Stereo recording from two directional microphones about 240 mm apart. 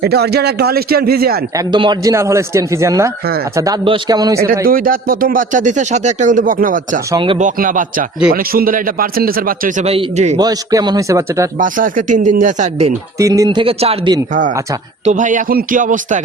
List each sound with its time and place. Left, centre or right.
0.0 s speech: right
1.5 s a man's voice: centre
4.6 s speech: right
7.1 s speech: right
7.4 s speech: right
10.3 s a man's voice: centre
11.6 s speech: right
13.1 s a man's voice: centre
15.0 s speech: right